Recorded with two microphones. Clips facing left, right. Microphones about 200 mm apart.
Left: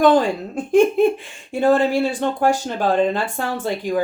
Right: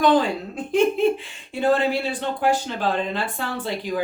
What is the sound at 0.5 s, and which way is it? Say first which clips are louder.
Speech: left 5 dB; 50° left (ahead or behind).